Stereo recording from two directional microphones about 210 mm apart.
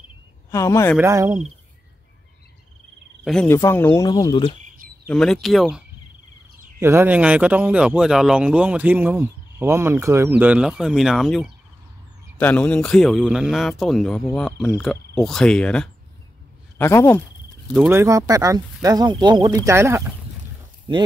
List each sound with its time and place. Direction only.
0.5 s speech: 15° left (ahead or behind)
0.9 s speech: 15° right (ahead or behind)
3.3 s speech: 5° left (ahead or behind)
5.0 s speech: 5° left (ahead or behind)
17.7 s speech: 10° right (ahead or behind)